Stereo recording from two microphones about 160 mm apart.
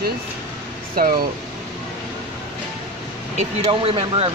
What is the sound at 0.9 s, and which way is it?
Speech, 65° right (ahead or behind).